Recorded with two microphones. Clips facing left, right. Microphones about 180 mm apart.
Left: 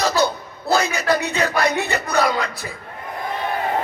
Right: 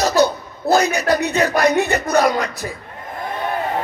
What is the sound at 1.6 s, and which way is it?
Speech, 15° right (ahead or behind).